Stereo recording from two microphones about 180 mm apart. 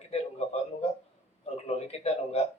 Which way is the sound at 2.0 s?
35° left (ahead or behind).